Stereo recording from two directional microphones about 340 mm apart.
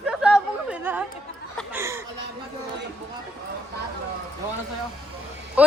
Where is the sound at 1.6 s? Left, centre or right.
Centre.